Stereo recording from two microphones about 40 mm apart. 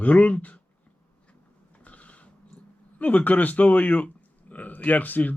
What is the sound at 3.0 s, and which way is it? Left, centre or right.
A man's voice, left.